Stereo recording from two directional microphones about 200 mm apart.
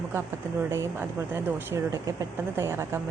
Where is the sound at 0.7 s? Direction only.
15° right (ahead or behind).